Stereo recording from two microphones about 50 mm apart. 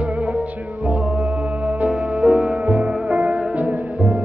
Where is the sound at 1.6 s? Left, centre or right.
Right.